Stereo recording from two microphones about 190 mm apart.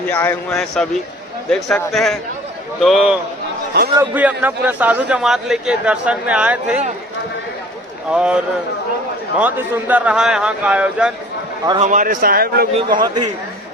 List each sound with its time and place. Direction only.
0.1 s a man's voice: 10° left (ahead or behind); by 6.8 s 5° right (ahead or behind)
8.1 s a man's voice: 5° right (ahead or behind)
11.8 s a man's voice: 40° right (ahead or behind)
12.7 s a man's voice: 25° right (ahead or behind)